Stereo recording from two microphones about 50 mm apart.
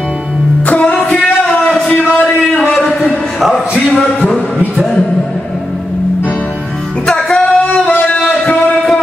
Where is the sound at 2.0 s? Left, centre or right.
Centre.